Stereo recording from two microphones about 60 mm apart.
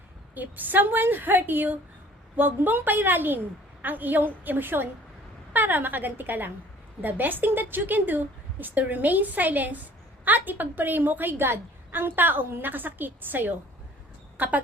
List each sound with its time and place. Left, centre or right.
0.3 s a woman's voice: right